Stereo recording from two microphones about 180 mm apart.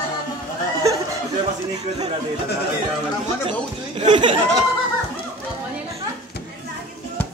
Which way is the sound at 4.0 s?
25° right (ahead or behind).